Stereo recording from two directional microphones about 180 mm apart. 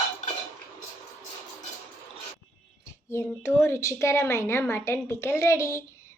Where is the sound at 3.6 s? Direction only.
15° left (ahead or behind).